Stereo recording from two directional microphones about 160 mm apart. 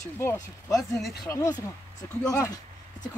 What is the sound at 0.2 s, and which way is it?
Speech, 15° left (ahead or behind).